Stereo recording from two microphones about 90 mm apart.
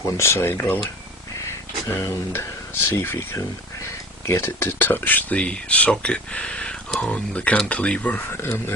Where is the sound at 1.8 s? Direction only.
30° left (ahead or behind).